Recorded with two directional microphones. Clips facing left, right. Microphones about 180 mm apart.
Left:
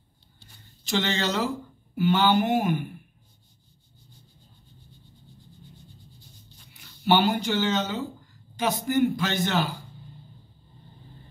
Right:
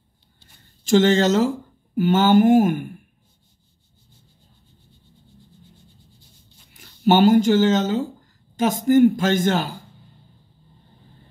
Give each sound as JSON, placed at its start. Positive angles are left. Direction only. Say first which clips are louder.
{"t": 0.8, "sound": "a man's voice", "louder": "right 11 dB", "side_deg": -45}
{"t": 6.7, "sound": "a man's voice", "louder": "right 5 dB", "side_deg": -45}